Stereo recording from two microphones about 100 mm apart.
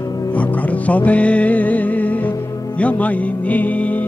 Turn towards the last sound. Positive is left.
turn(degrees=15)  # may be behind; listen again after turning